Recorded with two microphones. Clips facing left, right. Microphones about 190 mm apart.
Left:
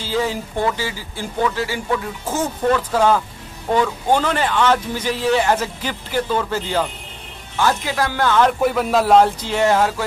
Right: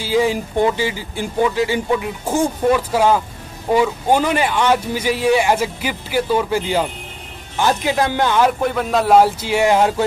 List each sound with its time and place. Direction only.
0.0 s speech: 15° right (ahead or behind)
8.5 s speech: 5° left (ahead or behind); by 10.0 s 20° right (ahead or behind)